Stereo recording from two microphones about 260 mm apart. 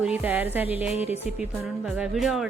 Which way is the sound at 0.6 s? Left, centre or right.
Left.